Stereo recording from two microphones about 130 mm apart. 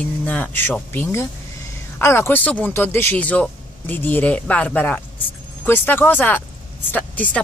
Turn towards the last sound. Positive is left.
turn(degrees=10)  # may be behind; listen again after turning